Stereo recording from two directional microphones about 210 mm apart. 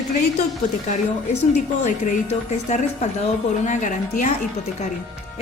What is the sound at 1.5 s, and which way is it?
A woman's voice, 35° left (ahead or behind).